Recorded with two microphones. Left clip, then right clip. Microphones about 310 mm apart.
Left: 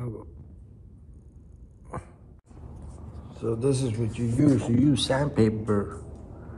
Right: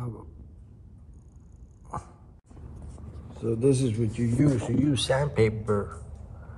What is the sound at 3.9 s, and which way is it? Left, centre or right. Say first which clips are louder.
Speech: right 1 dB; centre.